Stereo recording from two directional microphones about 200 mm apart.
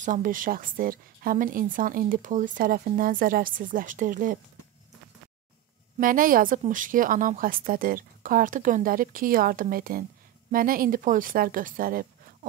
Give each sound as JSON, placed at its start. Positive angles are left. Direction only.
{"t": 0.0, "sound": "a woman's voice", "side_deg": -40}
{"t": 5.9, "sound": "a woman's voice", "side_deg": -45}